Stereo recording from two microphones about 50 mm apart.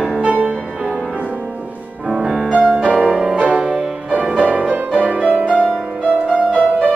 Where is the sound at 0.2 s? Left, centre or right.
Right.